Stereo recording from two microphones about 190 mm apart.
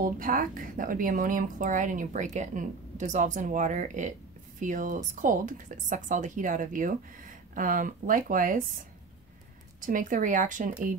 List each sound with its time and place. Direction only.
0.0 s a woman's voice: 45° right (ahead or behind)
9.8 s a woman's voice: 45° right (ahead or behind)